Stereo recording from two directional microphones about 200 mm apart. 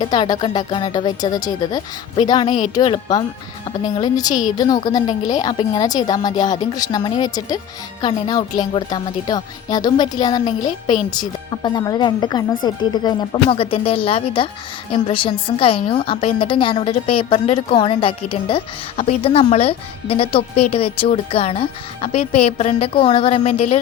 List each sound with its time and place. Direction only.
0.0 s a woman's voice: 20° left (ahead or behind)